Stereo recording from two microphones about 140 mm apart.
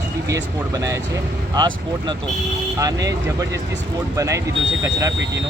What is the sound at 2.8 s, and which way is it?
Speech, 25° right (ahead or behind).